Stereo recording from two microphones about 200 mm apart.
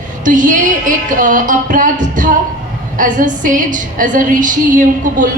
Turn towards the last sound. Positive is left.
turn(degrees=-40)  # may be behind; listen again after turning